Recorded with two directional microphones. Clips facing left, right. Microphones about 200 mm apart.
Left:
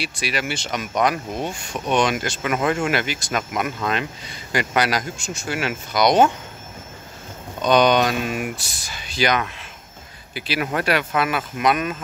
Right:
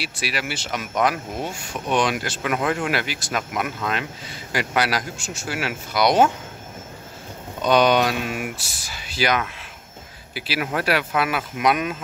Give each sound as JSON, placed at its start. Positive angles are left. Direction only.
{"t": 0.0, "sound": "speech", "side_deg": -5}
{"t": 7.6, "sound": "speech", "side_deg": -5}